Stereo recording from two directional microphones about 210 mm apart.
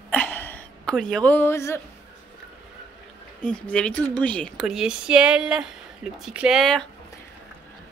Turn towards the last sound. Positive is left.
turn(degrees=0)  # may be behind; listen again after turning